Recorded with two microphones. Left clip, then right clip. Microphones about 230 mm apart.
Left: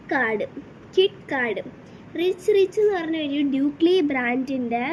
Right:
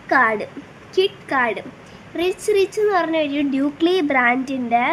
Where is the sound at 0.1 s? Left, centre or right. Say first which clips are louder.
Right 6 dB; centre.